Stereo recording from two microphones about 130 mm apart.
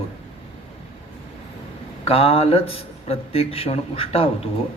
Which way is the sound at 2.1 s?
50° left (ahead or behind).